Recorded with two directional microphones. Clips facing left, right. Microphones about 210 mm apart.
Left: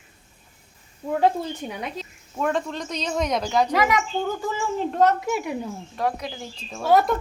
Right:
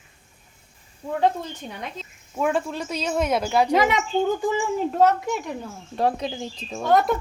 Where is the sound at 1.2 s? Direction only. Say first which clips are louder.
Left 1 dB; 10° left (ahead or behind).